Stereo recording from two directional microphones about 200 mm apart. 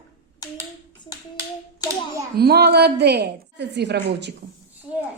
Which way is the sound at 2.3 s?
50° right (ahead or behind).